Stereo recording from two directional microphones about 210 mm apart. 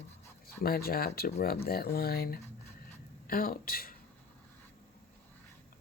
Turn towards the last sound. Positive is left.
turn(degrees=45)  # may be behind; listen again after turning